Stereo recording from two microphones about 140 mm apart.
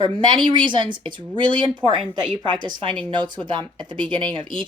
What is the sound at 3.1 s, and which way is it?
Speech, 35° right (ahead or behind).